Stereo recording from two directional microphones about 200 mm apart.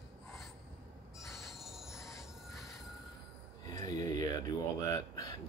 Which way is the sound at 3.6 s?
15° left (ahead or behind).